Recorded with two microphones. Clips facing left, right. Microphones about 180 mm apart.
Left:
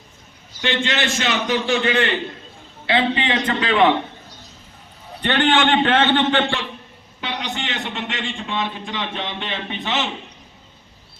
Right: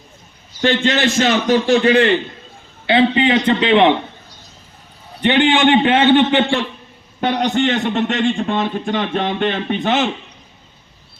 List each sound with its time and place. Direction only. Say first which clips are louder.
0.6 s a man's voice: right 7 dB; 40° right (ahead or behind); by 3.9 s 25° right (ahead or behind)
5.2 s a man's voice: right 5 dB; 15° right (ahead or behind)
7.2 s a man's voice: right 11 dB; 50° right (ahead or behind)